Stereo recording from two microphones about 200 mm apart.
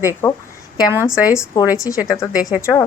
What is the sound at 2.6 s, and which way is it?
Speech, 15° left (ahead or behind).